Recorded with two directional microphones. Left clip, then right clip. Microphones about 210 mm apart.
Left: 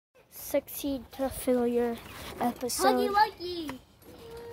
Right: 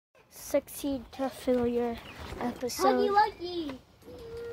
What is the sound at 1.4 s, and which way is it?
A child's voice, 10° left (ahead or behind).